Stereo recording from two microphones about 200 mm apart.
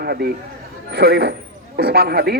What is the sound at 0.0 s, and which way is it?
A man's voice, 50° right (ahead or behind).